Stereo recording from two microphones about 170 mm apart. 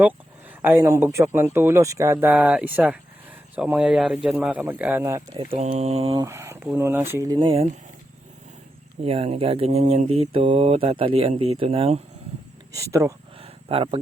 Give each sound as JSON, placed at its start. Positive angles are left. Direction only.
{"t": 0.6, "sound": "speech", "side_deg": -15}
{"t": 2.2, "sound": "speech", "side_deg": -5}
{"t": 5.3, "sound": "mantra", "side_deg": -35}
{"t": 6.1, "sound": "speech", "side_deg": -15}
{"t": 9.0, "sound": "mantra", "side_deg": -35}
{"t": 12.7, "sound": "speech", "side_deg": -15}
{"t": 13.4, "sound": "a sound", "side_deg": -35}